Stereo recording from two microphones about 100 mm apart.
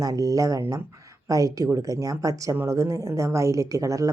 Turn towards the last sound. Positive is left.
turn(degrees=-35)  # may be behind; listen again after turning